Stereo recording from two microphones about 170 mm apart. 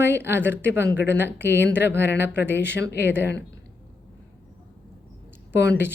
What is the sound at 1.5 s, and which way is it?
Speech, 80° left.